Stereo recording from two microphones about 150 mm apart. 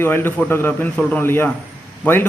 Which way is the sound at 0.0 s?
15° left (ahead or behind).